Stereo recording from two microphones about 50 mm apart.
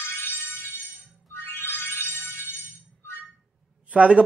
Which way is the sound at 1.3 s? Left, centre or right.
Left.